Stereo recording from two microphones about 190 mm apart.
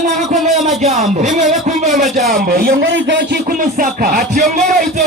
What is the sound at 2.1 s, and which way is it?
Speech, 50° right (ahead or behind).